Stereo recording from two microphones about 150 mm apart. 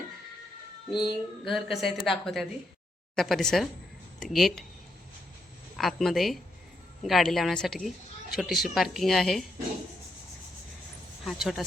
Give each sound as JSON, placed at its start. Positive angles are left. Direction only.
{"t": 0.9, "sound": "child singing", "side_deg": 30}
{"t": 1.5, "sound": "speech", "side_deg": 0}
{"t": 5.7, "sound": "speech", "side_deg": 0}
{"t": 11.2, "sound": "speech", "side_deg": 0}